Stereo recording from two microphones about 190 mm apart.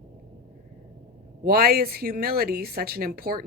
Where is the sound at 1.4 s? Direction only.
55° right (ahead or behind).